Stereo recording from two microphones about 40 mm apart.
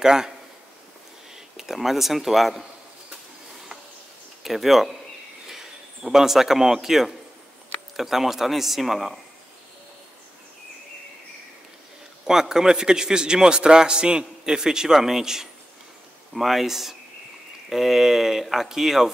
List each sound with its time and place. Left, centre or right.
0.0 s a man's voice: centre
1.3 s speech: centre
4.4 s a man's voice: centre
12.3 s a man's voice: centre